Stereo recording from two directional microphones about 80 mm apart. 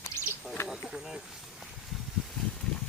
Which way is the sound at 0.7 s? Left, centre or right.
Centre.